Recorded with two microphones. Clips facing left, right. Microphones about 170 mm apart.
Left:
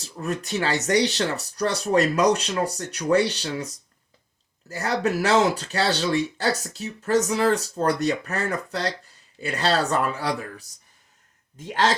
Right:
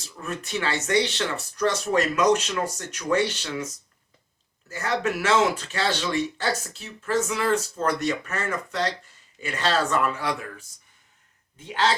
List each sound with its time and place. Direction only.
0.0 s speech: 35° left (ahead or behind)
4.7 s speech: 35° left (ahead or behind)
11.5 s a man's voice: 45° left (ahead or behind)